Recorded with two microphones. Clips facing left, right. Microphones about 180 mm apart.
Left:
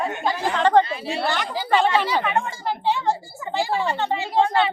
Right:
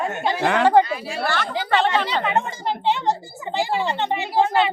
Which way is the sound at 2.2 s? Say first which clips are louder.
Right 1 dB; 20° right (ahead or behind).